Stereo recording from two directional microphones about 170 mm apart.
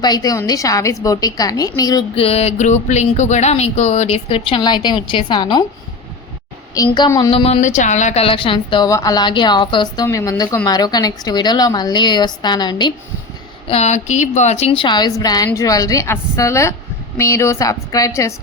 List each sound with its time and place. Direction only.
0.0 s a woman's voice: 25° left (ahead or behind)
2.1 s speech: 35° left (ahead or behind)
6.7 s a woman's voice: 25° left (ahead or behind)
13.7 s a woman's voice: 40° left (ahead or behind); by 18.3 s 20° left (ahead or behind)